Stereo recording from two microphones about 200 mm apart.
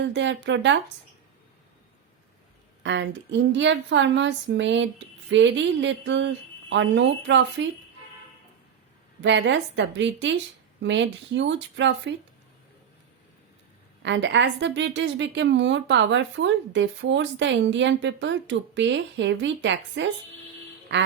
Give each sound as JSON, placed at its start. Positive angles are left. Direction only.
{"t": 0.0, "sound": "a woman's voice", "side_deg": -60}
{"t": 2.8, "sound": "a woman's voice", "side_deg": -65}
{"t": 9.2, "sound": "a woman's voice", "side_deg": -60}
{"t": 14.0, "sound": "a woman's voice", "side_deg": -65}